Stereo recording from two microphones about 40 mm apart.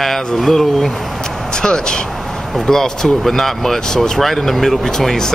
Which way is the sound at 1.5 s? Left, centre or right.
Centre.